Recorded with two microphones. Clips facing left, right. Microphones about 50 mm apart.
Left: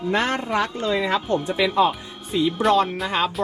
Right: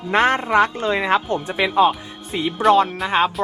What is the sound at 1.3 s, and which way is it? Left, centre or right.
Speech, right.